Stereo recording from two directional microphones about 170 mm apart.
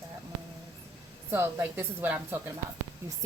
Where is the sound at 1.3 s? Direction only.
15° right (ahead or behind).